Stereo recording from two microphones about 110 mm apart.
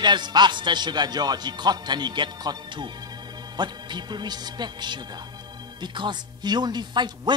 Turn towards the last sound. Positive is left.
turn(degrees=-40)  # may be behind; listen again after turning